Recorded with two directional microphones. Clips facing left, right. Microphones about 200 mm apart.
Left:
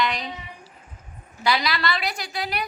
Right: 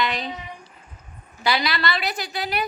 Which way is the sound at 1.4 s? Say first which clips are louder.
Even; centre (ahead or behind).